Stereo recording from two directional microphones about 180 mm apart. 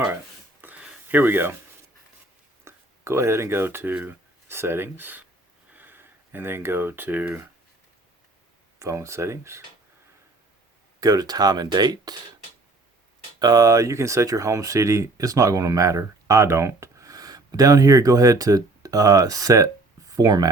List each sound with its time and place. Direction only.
0.6 s a sound: 10° right (ahead or behind)
2.6 s speech: 15° right (ahead or behind)
8.8 s speech: 15° right (ahead or behind)
11.0 s speech: 20° right (ahead or behind)
13.4 s speech: 20° right (ahead or behind)